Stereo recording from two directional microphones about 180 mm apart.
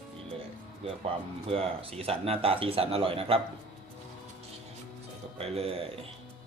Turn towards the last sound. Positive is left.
turn(degrees=-35)  # may be behind; listen again after turning